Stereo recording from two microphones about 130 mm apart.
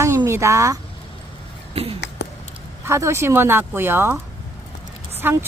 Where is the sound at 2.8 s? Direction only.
20° right (ahead or behind).